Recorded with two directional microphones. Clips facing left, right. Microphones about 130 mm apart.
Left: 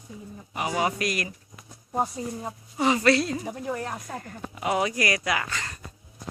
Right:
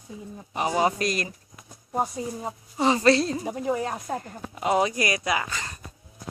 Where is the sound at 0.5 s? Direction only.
30° right (ahead or behind).